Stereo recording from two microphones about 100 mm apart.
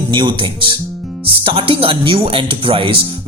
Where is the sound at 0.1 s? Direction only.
50° right (ahead or behind).